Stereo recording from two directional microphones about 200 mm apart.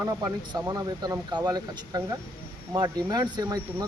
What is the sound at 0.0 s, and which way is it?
Speech, 15° right (ahead or behind).